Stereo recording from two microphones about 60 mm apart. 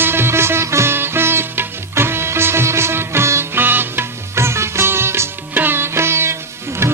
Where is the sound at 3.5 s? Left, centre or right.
Right.